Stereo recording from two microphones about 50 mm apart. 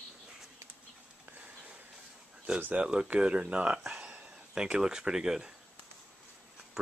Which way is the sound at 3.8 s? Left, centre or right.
Centre.